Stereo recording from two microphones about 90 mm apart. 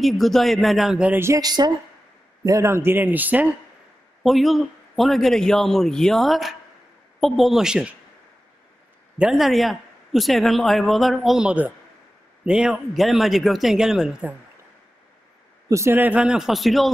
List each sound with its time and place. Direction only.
0.0 s a man's voice: centre (ahead or behind)
1.1 s a man's voice: 30° right (ahead or behind)
1.4 s a woman's voice: 50° right (ahead or behind)
2.4 s a man's voice: 35° right (ahead or behind); by 3.4 s 20° right (ahead or behind)
4.2 s a man's voice: centre (ahead or behind)
9.2 s a man's voice: centre (ahead or behind)
11.4 s a man's voice: 15° right (ahead or behind)
15.7 s a man's voice: 30° right (ahead or behind)
16.0 s a man's voice: 15° right (ahead or behind)